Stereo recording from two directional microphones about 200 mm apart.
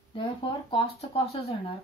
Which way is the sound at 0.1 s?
25° left (ahead or behind).